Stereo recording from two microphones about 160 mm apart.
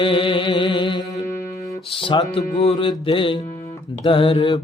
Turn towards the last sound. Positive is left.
turn(degrees=35)  # may be behind; listen again after turning